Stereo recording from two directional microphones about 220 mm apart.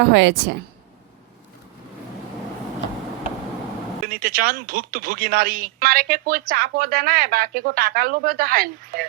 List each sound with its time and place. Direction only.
0.0 s a woman's voice: 50° right (ahead or behind)
4.0 s speech: 40° right (ahead or behind)